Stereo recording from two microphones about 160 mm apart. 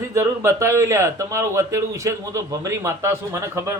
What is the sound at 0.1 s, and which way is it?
Speech, 15° right (ahead or behind).